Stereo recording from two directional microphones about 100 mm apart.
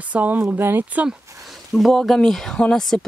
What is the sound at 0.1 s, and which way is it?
Speech, 20° right (ahead or behind).